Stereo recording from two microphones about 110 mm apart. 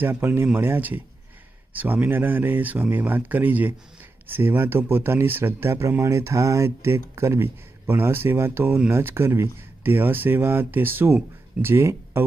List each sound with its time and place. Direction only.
0.0 s speech: 20° right (ahead or behind)